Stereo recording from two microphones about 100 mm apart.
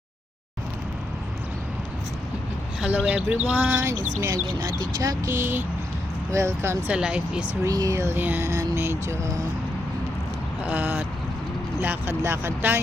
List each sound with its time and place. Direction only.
2.8 s speech: 15° right (ahead or behind)
4.8 s speech: 35° right (ahead or behind)
5.3 s speech: 20° right (ahead or behind)
6.9 s speech: 10° right (ahead or behind)
7.6 s speech: 35° right (ahead or behind)
10.6 s speech: 15° right (ahead or behind)